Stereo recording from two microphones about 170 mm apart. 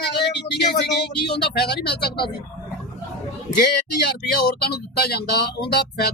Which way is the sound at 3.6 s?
70° left (ahead or behind).